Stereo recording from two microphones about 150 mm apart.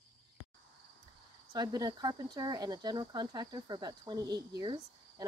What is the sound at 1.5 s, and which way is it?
Speech, 25° right (ahead or behind).